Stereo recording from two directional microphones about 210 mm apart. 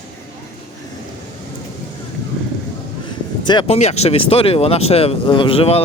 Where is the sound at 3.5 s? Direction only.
25° left (ahead or behind).